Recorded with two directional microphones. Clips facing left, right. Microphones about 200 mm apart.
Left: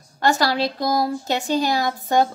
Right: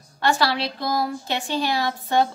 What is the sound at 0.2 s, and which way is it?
Speech, 45° left (ahead or behind).